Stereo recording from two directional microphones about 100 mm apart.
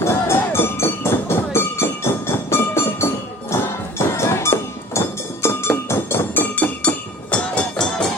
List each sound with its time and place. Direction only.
0.0 s music: 25° left (ahead or behind)
4.1 s music: 25° left (ahead or behind); by 8.1 s 5° left (ahead or behind)